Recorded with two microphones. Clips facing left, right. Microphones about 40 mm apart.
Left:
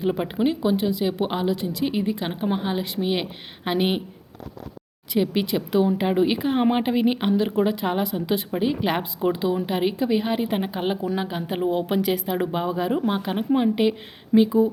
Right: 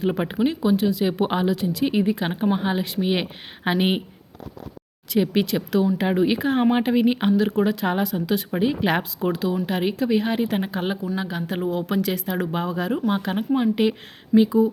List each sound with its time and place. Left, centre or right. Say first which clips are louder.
0.1 s speech: even; centre
0.3 s speech: right 1 dB; centre
1.0 s speech: right 2 dB; centre
5.1 s speech: right 1 dB; centre
8.4 s speech: right 2 dB; centre
9.3 s speech: right 1 dB; centre